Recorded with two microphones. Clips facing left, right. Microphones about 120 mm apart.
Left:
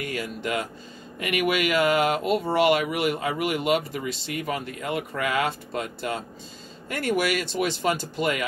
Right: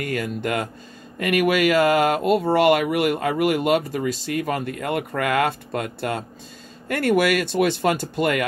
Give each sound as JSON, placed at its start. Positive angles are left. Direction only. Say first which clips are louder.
{"t": 0.0, "sound": "speech", "louder": "right 5 dB", "side_deg": -50}